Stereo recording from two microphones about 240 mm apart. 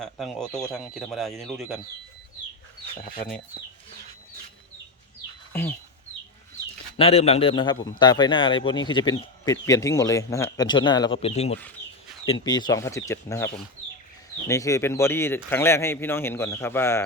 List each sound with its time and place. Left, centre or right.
0.0 s speech: centre
6.9 s a man's voice: left